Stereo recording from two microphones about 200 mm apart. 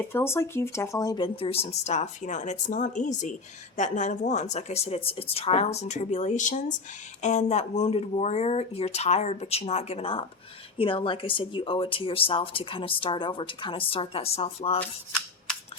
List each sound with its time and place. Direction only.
0.0 s speech: 10° left (ahead or behind); by 14.8 s 30° left (ahead or behind)